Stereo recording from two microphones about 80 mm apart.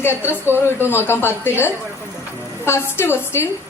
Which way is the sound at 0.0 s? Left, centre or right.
Left.